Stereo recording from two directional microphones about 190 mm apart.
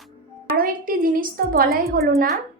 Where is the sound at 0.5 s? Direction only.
50° right (ahead or behind).